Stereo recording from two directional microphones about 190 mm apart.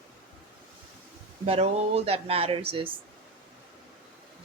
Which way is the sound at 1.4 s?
30° right (ahead or behind).